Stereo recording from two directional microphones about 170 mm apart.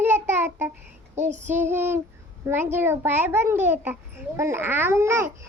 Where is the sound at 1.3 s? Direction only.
45° right (ahead or behind).